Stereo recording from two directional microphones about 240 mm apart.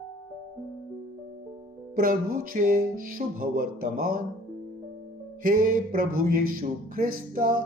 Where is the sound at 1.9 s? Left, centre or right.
Right.